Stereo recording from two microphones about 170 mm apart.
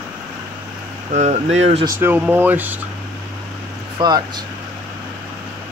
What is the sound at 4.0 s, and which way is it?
Speech, 25° right (ahead or behind).